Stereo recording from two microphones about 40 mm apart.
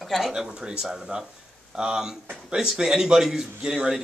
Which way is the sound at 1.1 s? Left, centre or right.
Right.